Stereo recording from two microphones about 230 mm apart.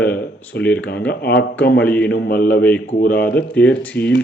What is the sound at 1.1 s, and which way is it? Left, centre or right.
Speech, left.